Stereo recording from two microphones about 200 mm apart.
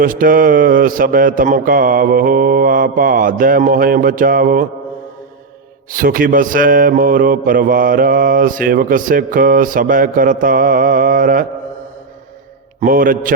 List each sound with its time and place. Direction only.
0.0 s mantra: 45° right (ahead or behind)
5.9 s mantra: 45° right (ahead or behind)
12.8 s mantra: 45° right (ahead or behind)